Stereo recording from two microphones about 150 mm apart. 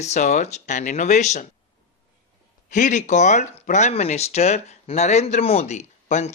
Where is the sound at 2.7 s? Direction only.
55° left (ahead or behind).